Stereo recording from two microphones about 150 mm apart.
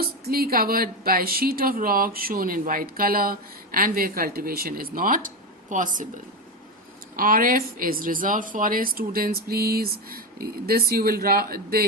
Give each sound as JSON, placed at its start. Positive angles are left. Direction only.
{"t": 0.0, "sound": "a woman's voice", "side_deg": -90}
{"t": 7.2, "sound": "a woman's voice", "side_deg": -70}